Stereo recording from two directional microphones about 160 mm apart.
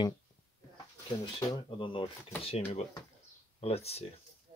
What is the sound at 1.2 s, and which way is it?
Speech, 25° left (ahead or behind).